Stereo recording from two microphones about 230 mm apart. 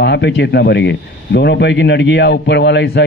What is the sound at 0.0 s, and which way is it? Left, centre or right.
Speech, left.